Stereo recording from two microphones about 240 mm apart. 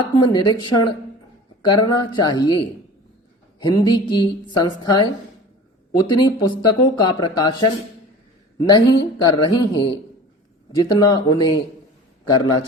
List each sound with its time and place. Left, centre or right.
0.0 s speech: centre
8.6 s speech: centre